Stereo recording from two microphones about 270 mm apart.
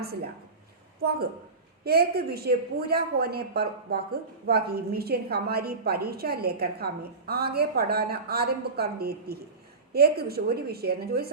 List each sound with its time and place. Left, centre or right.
1.8 s a woman's voice: right